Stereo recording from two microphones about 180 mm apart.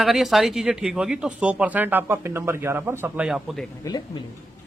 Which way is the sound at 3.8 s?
20° left (ahead or behind).